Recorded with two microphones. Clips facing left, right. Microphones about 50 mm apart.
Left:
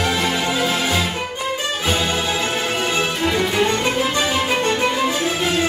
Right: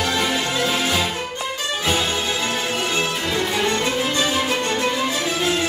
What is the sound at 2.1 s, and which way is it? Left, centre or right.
Music, left.